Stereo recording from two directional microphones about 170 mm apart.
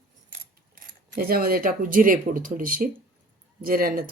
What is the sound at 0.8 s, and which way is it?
Speech, 55° right (ahead or behind).